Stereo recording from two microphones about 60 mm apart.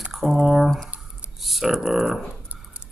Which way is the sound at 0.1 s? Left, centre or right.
Centre.